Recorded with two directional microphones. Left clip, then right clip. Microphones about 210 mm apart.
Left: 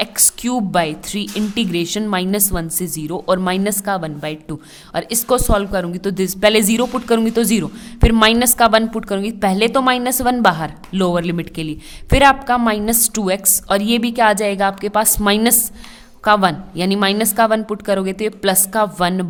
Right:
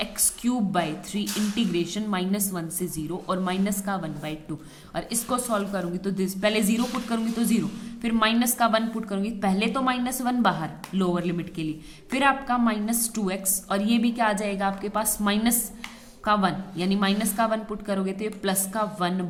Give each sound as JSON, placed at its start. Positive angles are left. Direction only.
{"t": 0.0, "sound": "speech", "side_deg": 50}